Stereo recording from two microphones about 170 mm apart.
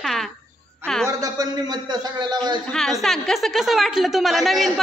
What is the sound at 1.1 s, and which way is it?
A man's voice, 20° right (ahead or behind).